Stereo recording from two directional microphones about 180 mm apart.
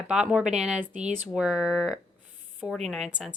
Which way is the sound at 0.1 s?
5° right (ahead or behind).